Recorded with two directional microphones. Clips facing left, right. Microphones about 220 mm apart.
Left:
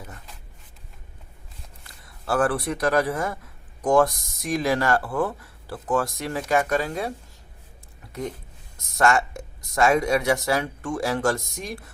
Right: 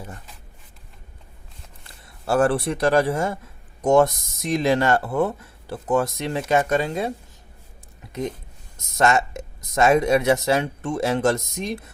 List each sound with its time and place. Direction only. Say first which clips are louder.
2.2 s speech: right 3 dB; 25° right (ahead or behind)
9.0 s speech: right 1 dB; 20° right (ahead or behind)